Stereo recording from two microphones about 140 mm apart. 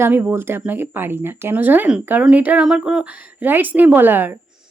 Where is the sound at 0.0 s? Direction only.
15° right (ahead or behind).